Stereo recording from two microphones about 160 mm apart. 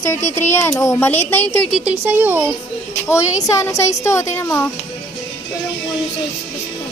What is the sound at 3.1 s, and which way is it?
Speech, 15° left (ahead or behind).